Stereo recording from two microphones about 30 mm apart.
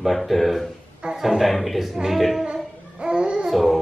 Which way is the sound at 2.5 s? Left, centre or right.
Right.